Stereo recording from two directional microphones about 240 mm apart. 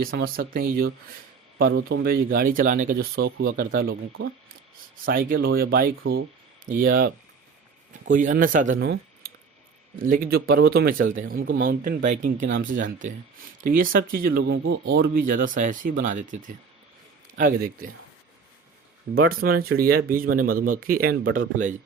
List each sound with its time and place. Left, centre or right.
0.0 s speech: right
3.7 s speech: right
8.8 s a sound: right
10.0 s speech: right
13.6 s speech: right
14.9 s speech: right
19.1 s speech: right